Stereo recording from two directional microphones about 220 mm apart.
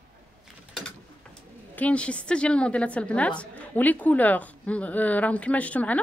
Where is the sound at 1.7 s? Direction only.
5° left (ahead or behind).